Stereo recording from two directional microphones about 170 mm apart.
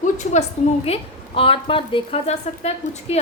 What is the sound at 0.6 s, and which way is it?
Speech, 45° left (ahead or behind).